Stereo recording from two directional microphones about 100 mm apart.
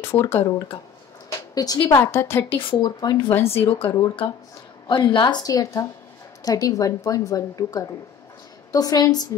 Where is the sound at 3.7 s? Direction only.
65° left (ahead or behind).